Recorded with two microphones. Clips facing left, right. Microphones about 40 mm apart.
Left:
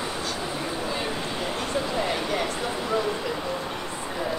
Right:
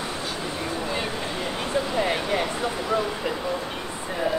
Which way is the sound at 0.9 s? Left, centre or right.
Centre.